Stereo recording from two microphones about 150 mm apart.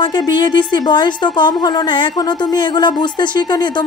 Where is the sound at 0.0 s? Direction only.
30° left (ahead or behind).